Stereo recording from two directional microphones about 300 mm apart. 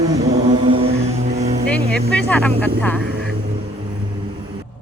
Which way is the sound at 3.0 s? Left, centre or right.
Right.